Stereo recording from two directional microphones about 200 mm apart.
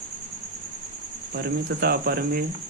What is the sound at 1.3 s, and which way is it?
Speech, 50° right (ahead or behind).